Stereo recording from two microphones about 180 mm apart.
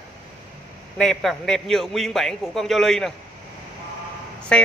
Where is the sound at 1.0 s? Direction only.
Centre (ahead or behind).